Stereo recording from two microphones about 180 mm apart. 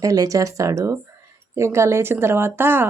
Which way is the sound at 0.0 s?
20° right (ahead or behind).